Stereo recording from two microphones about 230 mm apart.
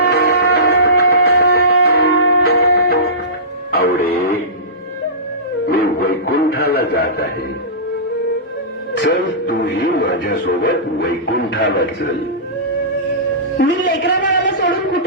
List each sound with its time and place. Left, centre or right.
0.1 s music: left
5.6 s music: left
9.0 s music: left
11.3 s speech: left
13.6 s a man's voice: left